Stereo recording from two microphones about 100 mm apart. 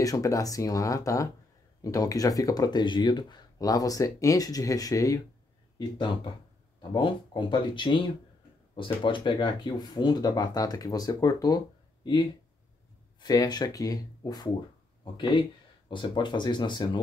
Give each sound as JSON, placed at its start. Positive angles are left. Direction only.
{"t": 0.0, "sound": "speech", "side_deg": 35}
{"t": 6.9, "sound": "speech", "side_deg": 55}
{"t": 15.9, "sound": "speech", "side_deg": 50}